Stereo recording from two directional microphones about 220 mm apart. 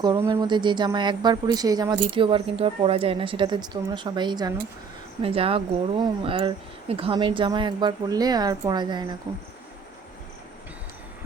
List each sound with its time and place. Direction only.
0.0 s speech: 20° right (ahead or behind)